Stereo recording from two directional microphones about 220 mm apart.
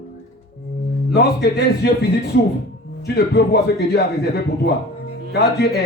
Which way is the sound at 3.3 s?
50° left (ahead or behind).